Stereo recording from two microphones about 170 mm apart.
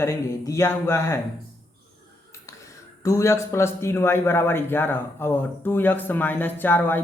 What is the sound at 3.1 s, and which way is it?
A man's voice, 15° left (ahead or behind).